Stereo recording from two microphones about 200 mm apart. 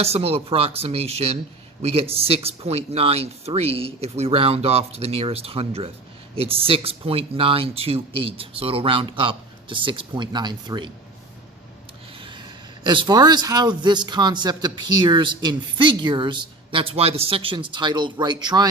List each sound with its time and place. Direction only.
0.0 s speech: 30° right (ahead or behind)
12.1 s speech: 25° right (ahead or behind)